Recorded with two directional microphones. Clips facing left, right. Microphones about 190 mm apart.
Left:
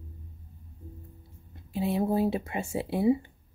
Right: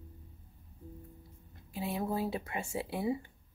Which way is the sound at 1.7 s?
25° left (ahead or behind).